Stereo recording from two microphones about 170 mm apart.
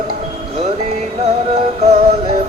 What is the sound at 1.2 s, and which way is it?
Music, 40° right (ahead or behind).